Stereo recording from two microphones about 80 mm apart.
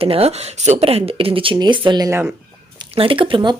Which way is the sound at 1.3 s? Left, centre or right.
Right.